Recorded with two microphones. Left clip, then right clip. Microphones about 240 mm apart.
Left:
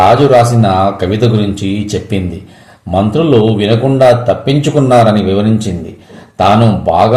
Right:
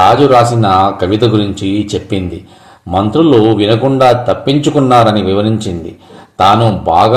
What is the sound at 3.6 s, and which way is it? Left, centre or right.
Speech, right.